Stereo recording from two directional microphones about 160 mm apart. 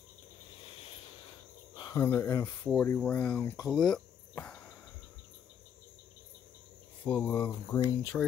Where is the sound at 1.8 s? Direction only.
25° left (ahead or behind).